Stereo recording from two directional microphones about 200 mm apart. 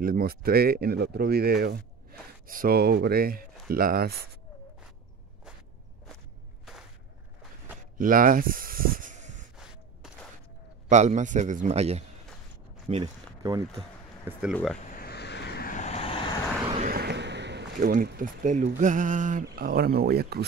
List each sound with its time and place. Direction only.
0.0 s speech: 45° right (ahead or behind)
8.0 s snake: 45° right (ahead or behind)
10.9 s a man's voice: 35° right (ahead or behind)
12.9 s speech: 20° right (ahead or behind)
14.4 s speech: 5° left (ahead or behind)
14.9 s vehicle: 50° left (ahead or behind); by 16.3 s 25° left (ahead or behind)
16.6 s a sound: 30° right (ahead or behind)
16.9 s speech: 55° right (ahead or behind)